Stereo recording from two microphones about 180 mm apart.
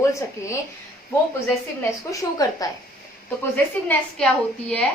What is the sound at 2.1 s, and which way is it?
Speech, 20° left (ahead or behind).